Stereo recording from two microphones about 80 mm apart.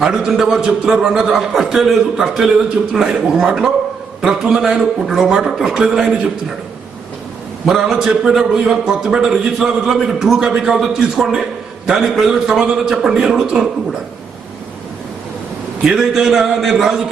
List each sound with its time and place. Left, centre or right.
0.0 s a man's voice: centre
7.6 s a man's voice: centre
15.8 s a man's voice: centre